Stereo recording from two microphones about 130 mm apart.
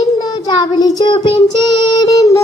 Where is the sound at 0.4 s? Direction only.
30° left (ahead or behind).